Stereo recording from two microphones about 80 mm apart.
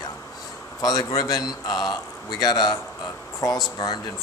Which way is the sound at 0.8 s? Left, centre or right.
Left.